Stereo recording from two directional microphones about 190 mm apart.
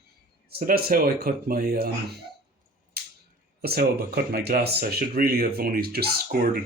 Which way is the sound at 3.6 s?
55° right (ahead or behind).